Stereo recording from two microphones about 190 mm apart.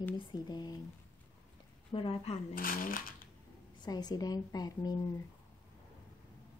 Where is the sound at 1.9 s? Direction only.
30° left (ahead or behind).